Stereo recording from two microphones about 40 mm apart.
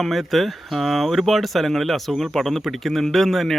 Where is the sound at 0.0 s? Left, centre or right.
Centre.